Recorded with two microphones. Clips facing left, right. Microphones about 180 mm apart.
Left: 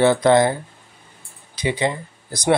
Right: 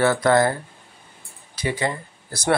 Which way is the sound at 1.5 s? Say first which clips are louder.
Left 3 dB; 20° left (ahead or behind).